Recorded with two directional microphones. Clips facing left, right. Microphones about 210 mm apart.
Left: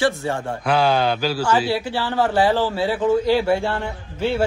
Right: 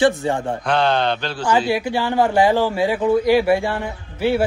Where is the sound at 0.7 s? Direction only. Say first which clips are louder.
Left 1 dB; 5° left (ahead or behind).